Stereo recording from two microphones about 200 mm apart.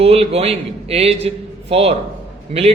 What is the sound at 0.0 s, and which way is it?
A man's voice, 30° right (ahead or behind).